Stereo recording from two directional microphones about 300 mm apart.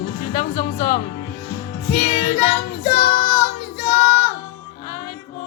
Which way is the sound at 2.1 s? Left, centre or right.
Centre.